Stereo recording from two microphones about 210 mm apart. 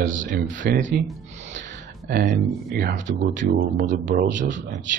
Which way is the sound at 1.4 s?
35° right (ahead or behind).